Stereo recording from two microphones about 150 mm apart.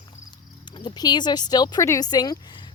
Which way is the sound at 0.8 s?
30° left (ahead or behind).